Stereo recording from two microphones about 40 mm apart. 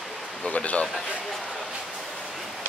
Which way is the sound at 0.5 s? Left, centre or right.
Left.